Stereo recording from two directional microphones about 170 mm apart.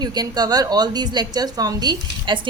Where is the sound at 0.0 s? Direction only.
25° right (ahead or behind).